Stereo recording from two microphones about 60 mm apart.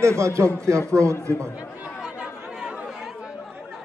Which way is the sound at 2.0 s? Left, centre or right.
Centre.